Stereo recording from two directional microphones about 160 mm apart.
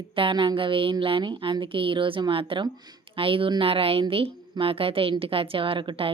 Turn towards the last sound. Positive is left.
turn(degrees=-35)  # may be behind; listen again after turning